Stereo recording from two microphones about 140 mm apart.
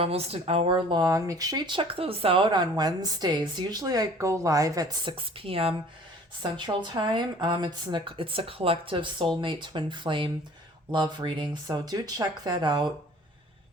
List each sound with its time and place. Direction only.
0.0 s speech: 45° right (ahead or behind)